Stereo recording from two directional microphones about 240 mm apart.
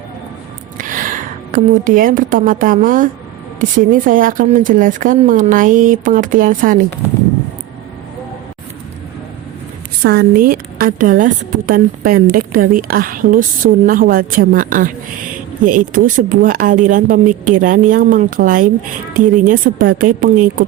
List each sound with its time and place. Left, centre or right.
0.8 s a woman's voice: right
10.0 s speech: right